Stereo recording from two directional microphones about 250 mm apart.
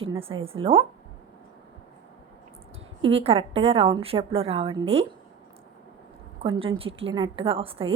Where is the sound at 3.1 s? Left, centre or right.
Right.